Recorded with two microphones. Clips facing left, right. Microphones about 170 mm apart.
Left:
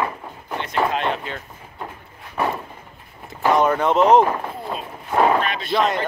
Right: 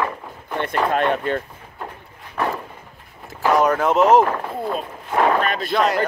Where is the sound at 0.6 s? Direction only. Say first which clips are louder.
Right 2 dB; 55° right (ahead or behind).